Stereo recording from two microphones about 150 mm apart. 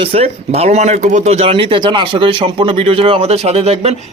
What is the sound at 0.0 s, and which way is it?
Speech, 40° right (ahead or behind).